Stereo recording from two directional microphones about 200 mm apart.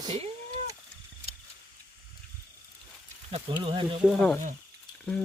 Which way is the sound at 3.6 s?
25° right (ahead or behind).